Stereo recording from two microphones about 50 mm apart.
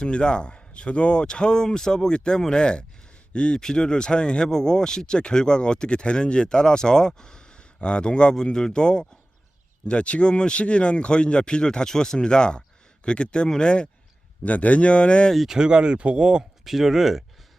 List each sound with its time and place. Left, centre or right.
0.0 s speech: centre
14.4 s speech: left
15.4 s speech: centre
16.6 s speech: centre